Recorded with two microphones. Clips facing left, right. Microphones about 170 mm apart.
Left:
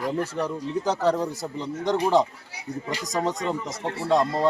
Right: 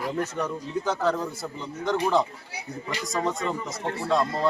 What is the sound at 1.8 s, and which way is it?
Speech, 35° left (ahead or behind).